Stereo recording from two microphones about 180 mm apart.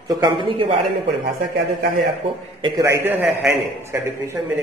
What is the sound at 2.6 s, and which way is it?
A man's voice, 20° right (ahead or behind).